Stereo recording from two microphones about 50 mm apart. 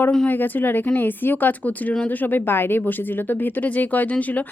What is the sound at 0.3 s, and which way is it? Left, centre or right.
Speech, left.